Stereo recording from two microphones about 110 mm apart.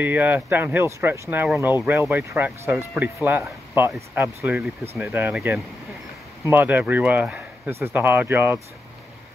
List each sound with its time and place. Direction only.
0.0 s speech: 15° right (ahead or behind)
6.5 s speech: 15° right (ahead or behind)